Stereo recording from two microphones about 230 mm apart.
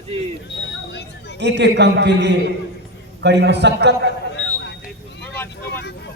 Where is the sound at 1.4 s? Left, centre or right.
Right.